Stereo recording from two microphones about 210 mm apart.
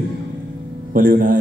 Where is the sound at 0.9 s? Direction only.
40° right (ahead or behind).